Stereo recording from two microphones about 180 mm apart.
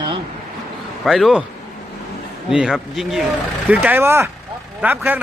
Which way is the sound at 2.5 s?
5° right (ahead or behind).